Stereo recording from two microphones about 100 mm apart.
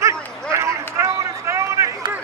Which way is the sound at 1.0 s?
30° right (ahead or behind).